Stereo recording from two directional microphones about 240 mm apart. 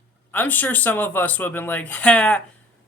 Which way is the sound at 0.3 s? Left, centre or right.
Centre.